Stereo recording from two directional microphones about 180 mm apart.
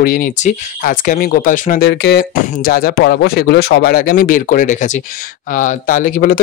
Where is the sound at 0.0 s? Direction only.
50° left (ahead or behind).